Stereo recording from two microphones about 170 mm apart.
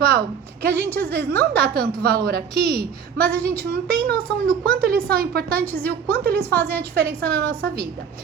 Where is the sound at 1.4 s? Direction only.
60° right (ahead or behind).